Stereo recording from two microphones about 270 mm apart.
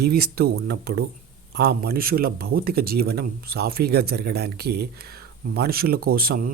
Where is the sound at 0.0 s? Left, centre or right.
Right.